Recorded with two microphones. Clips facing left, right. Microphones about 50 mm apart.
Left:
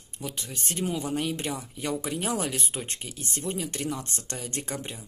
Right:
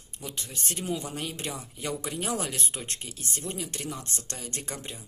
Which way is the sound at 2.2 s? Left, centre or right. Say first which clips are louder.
Left 2 dB; centre.